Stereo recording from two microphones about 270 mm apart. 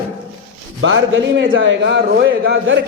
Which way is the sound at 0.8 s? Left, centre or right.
Right.